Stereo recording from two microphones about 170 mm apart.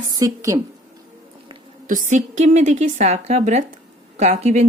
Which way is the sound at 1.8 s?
50° right (ahead or behind).